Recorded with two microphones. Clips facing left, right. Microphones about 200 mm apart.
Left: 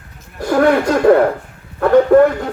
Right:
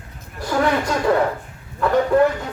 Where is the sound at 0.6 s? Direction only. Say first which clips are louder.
Left 8 dB; 55° left (ahead or behind).